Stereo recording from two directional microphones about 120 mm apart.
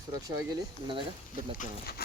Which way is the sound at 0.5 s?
40° right (ahead or behind).